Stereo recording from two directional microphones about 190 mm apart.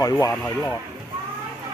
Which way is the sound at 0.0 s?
20° left (ahead or behind).